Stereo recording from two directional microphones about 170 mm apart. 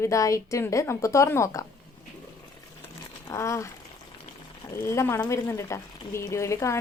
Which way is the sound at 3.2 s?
15° left (ahead or behind).